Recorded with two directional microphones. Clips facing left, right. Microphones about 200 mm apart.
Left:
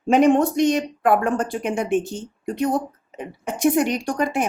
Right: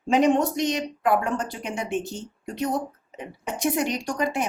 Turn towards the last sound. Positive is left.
turn(degrees=50)  # may be behind; listen again after turning